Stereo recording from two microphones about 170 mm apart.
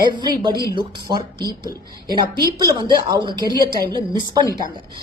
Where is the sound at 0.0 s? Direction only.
25° right (ahead or behind).